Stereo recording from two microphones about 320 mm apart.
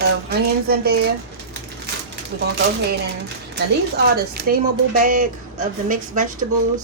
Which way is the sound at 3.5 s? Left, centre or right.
Right.